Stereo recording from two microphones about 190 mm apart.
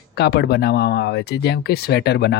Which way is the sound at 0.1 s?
55° left (ahead or behind).